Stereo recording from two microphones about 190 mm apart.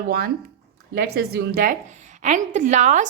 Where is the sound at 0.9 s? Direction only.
60° right (ahead or behind).